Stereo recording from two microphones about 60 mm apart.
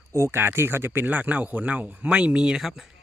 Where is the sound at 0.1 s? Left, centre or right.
Right.